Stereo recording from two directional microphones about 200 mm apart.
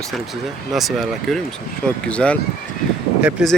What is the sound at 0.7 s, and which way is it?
Speech, centre (ahead or behind).